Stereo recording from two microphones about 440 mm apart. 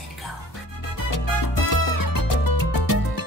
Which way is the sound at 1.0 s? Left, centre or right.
Left.